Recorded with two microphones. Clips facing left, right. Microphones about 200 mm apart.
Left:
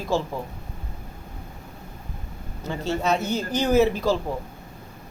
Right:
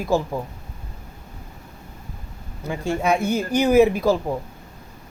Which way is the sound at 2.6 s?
10° right (ahead or behind).